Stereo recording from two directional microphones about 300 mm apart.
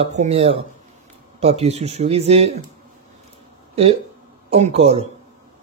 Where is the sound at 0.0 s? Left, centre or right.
Right.